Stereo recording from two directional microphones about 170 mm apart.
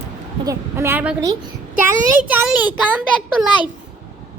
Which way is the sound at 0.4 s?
15° right (ahead or behind).